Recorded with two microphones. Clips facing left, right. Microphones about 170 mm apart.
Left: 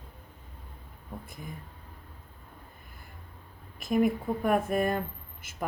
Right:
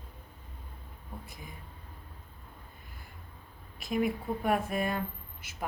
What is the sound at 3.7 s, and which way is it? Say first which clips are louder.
Speech: left 5 dB; 50° left (ahead or behind).